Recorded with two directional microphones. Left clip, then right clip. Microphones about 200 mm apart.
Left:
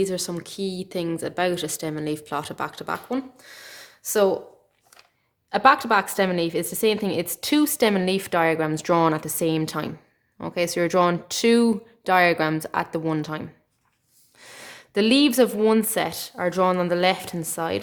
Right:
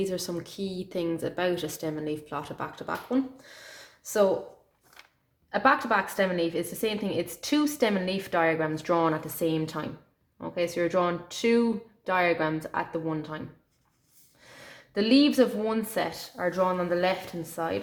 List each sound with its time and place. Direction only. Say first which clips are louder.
0.0 s a woman's voice: left 5 dB; 30° left (ahead or behind)
5.5 s a woman's voice: left 6 dB; 40° left (ahead or behind)
14.4 s a woman's voice: left 6 dB; 40° left (ahead or behind)